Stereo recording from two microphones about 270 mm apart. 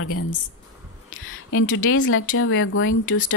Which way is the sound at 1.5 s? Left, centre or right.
Left.